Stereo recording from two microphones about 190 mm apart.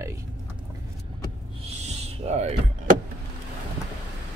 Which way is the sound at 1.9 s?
35° right (ahead or behind).